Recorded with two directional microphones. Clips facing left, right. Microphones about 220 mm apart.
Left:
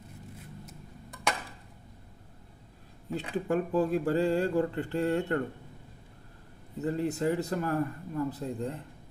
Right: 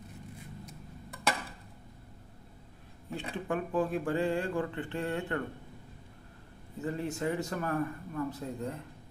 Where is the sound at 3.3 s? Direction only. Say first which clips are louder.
Left 4 dB; 40° left (ahead or behind).